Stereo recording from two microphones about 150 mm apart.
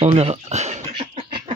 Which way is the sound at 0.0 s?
45° right (ahead or behind).